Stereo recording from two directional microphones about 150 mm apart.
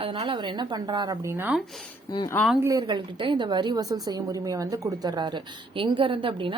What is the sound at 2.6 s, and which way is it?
A woman's voice, 25° right (ahead or behind).